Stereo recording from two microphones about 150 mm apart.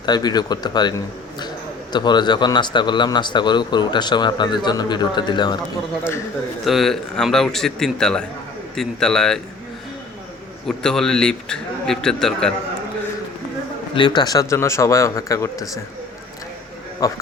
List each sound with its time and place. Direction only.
0.0 s a man's voice: 25° left (ahead or behind)
6.7 s a man's voice: centre (ahead or behind)
10.7 s a man's voice: 5° left (ahead or behind)
13.9 s a man's voice: 30° left (ahead or behind)
17.0 s a man's voice: 20° left (ahead or behind)